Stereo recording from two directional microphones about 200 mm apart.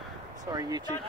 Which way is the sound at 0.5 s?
20° right (ahead or behind).